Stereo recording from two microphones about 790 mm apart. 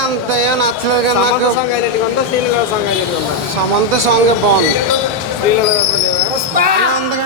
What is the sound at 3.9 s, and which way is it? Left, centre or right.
Speech, right.